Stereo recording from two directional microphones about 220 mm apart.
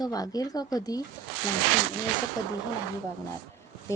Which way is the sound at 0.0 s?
15° left (ahead or behind).